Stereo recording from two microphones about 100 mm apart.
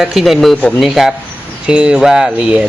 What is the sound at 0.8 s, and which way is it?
A man's voice, centre (ahead or behind).